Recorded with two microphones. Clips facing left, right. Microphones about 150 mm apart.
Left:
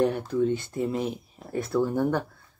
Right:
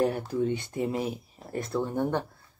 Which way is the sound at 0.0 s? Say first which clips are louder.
Left 3 dB; 10° right (ahead or behind).